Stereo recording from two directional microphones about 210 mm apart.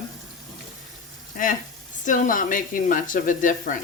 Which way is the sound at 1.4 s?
40° left (ahead or behind).